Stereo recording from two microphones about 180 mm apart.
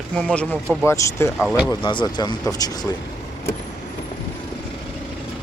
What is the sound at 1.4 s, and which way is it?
Speech, centre (ahead or behind).